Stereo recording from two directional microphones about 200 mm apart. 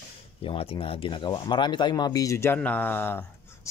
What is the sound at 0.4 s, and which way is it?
Speech, 30° left (ahead or behind).